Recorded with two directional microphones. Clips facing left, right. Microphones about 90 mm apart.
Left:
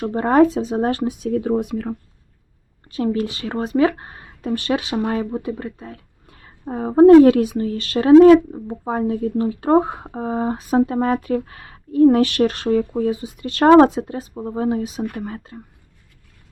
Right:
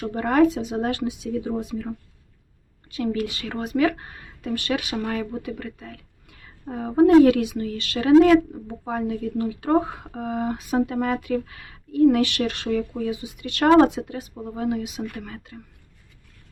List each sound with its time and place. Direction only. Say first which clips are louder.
0.0 s speech: left 4 dB; 35° left (ahead or behind); by 2.0 s 60° left (ahead or behind)
2.9 s speech: left 4 dB; 35° left (ahead or behind)